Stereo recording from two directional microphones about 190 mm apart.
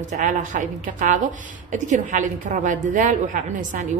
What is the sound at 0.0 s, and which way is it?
A woman's voice, 40° right (ahead or behind).